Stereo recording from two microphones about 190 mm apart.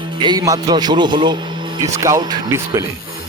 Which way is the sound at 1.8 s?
15° right (ahead or behind).